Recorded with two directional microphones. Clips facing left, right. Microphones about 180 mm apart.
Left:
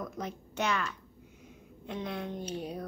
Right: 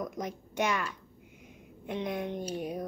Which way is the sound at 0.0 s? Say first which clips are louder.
Right 2 dB; 15° right (ahead or behind).